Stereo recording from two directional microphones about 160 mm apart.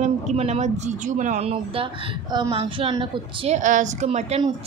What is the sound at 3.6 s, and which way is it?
Speech, 50° right (ahead or behind).